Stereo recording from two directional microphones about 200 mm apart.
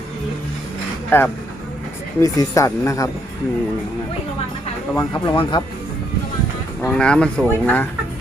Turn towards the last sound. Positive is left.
turn(degrees=5)  # may be behind; listen again after turning